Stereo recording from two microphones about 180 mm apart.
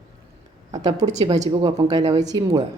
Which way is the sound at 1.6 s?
20° right (ahead or behind).